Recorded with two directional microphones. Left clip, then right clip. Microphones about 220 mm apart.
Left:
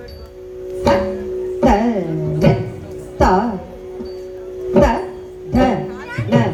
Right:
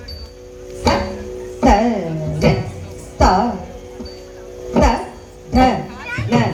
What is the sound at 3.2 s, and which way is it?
Music, 50° left (ahead or behind).